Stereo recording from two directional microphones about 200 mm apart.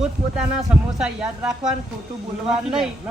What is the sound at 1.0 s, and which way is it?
Speech, 5° right (ahead or behind).